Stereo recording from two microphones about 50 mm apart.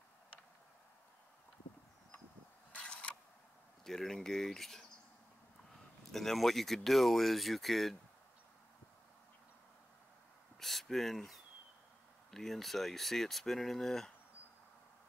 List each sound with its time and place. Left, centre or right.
2.8 s a sound: left
3.8 s speech: centre
6.1 s speech: centre
10.6 s speech: centre